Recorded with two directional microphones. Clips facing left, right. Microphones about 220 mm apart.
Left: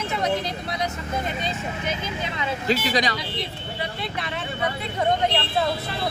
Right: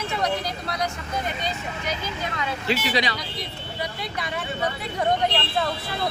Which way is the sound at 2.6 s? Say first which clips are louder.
Left 2 dB; 45° left (ahead or behind).